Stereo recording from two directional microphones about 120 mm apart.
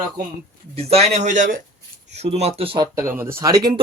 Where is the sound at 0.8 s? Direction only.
60° right (ahead or behind); by 1.5 s 85° right.